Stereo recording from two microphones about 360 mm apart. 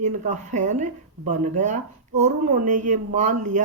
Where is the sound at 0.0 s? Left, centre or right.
Centre.